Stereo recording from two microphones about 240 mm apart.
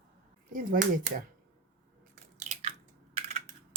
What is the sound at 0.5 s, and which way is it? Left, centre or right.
Speech, right.